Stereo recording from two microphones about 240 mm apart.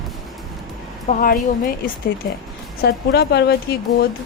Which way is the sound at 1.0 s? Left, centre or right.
Left.